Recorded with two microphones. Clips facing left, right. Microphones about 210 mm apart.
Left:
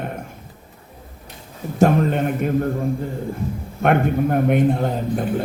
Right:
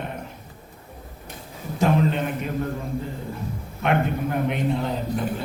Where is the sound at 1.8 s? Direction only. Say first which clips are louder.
Left 4 dB; 50° left (ahead or behind).